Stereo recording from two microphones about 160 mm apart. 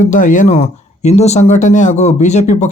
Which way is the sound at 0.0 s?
55° left (ahead or behind).